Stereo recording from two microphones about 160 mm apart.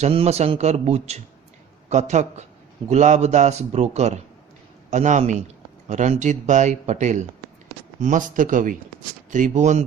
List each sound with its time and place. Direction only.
0.0 s speech: 40° right (ahead or behind)